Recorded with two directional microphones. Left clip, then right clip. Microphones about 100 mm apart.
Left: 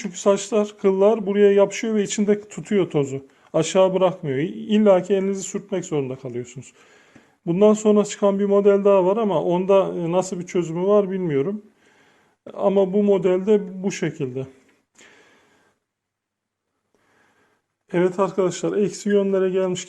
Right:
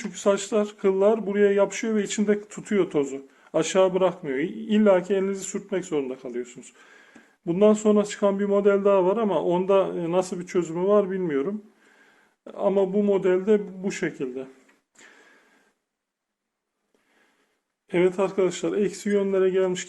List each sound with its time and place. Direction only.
0.0 s speech: 35° left (ahead or behind)
12.5 s a man's voice: 45° left (ahead or behind)
14.9 s a sound: 50° left (ahead or behind)
17.8 s speech: 35° left (ahead or behind)